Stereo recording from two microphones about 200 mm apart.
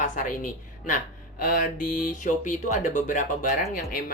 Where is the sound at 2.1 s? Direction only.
40° left (ahead or behind).